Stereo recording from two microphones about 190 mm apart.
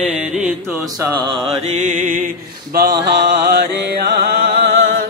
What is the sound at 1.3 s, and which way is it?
Mantra, 30° right (ahead or behind).